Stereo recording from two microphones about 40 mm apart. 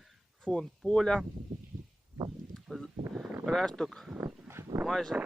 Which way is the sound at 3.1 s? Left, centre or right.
Centre.